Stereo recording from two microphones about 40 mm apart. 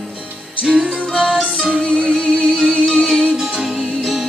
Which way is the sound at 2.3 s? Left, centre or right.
Centre.